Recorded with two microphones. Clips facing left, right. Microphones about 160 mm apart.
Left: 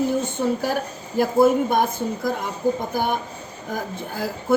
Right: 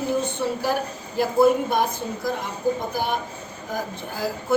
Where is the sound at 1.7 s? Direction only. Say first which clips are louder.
Left 2 dB; 50° left (ahead or behind).